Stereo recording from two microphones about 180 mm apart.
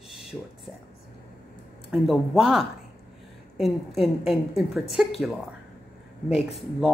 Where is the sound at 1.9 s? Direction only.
Centre (ahead or behind).